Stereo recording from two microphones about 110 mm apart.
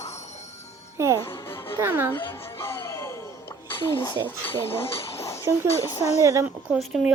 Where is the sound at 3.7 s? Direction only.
45° left (ahead or behind).